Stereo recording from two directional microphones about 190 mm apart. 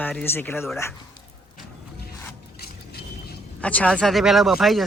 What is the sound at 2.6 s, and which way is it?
Vehicle, 55° left (ahead or behind).